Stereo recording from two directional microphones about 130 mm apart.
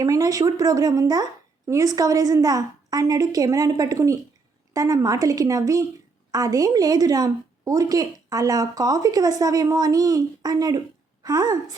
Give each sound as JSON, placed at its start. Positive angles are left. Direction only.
{"t": 0.0, "sound": "a woman's voice", "side_deg": -25}